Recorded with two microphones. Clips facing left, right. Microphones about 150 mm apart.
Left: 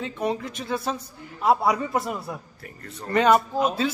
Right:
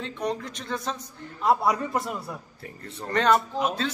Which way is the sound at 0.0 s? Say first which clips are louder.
Left 3 dB; 5° left (ahead or behind).